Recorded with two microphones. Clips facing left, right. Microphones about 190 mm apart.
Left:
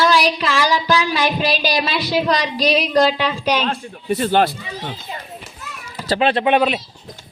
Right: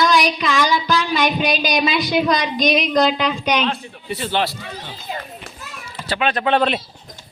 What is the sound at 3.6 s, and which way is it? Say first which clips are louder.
Speech: even; 45° left (ahead or behind).